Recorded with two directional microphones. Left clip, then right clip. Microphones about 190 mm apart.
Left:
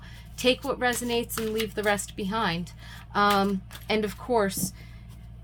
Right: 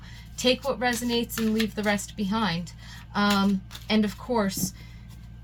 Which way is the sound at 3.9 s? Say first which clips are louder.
Left 1 dB; 50° left (ahead or behind).